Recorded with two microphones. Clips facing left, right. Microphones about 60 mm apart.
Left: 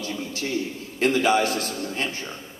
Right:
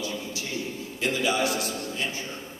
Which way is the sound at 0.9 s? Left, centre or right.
Left.